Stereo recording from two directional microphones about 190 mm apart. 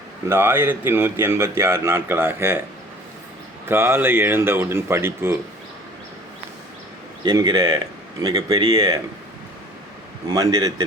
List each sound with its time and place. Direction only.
0.3 s speech: 10° right (ahead or behind)
3.7 s speech: 10° right (ahead or behind)
7.3 s speech: 20° right (ahead or behind)
10.2 s speech: 20° right (ahead or behind)